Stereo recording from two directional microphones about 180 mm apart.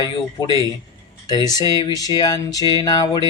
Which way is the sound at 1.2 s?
20° left (ahead or behind).